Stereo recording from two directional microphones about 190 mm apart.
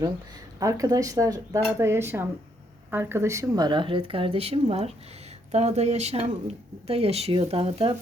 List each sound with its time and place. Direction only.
0.6 s speech: 15° right (ahead or behind)